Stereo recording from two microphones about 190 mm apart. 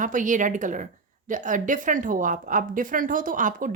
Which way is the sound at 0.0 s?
45° right (ahead or behind).